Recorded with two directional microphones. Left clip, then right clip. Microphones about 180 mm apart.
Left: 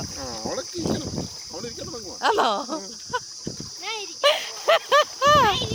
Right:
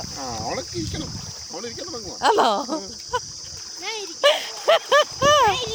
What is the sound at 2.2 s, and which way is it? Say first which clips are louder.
Cricket: right 3 dB; 20° right (ahead or behind).